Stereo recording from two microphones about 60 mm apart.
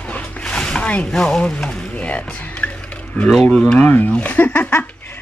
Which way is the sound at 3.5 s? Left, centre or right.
Centre.